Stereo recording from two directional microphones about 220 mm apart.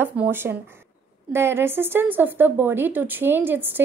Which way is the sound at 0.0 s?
10° right (ahead or behind).